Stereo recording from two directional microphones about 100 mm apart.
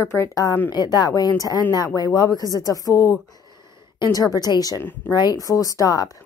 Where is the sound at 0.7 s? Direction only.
45° left (ahead or behind).